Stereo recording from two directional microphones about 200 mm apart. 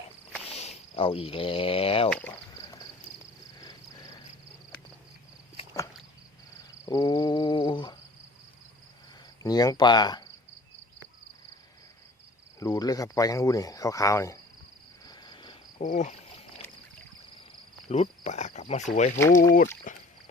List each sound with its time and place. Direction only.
0.4 s speech: 30° left (ahead or behind)
2.0 s speech: 5° left (ahead or behind)
6.8 s a sound: 20° left (ahead or behind)
9.4 s speech: 20° left (ahead or behind)
12.5 s speech: 15° left (ahead or behind)
15.0 s cricket: 20° left (ahead or behind)
15.8 s speech: 35° left (ahead or behind)
17.8 s speech: 35° left (ahead or behind)
19.9 s a sound: 40° left (ahead or behind)